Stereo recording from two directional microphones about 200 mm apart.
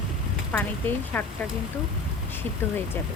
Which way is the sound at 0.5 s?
10° left (ahead or behind).